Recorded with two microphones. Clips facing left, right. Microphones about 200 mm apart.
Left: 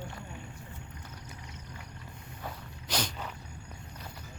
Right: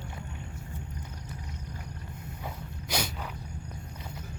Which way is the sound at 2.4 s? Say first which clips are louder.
Right 1 dB; 10° right (ahead or behind).